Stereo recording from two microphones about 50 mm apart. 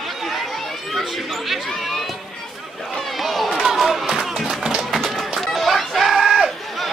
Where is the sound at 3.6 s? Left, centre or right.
Centre.